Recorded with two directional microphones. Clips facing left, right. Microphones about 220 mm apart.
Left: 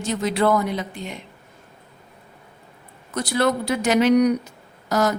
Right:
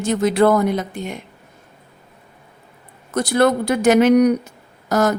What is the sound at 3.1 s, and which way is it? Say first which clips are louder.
A woman's voice: right 5 dB; 50° right (ahead or behind).